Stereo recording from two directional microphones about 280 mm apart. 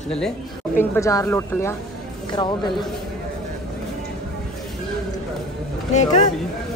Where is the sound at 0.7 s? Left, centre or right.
Centre.